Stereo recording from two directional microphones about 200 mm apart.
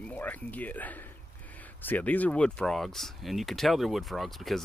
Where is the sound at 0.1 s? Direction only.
5° left (ahead or behind).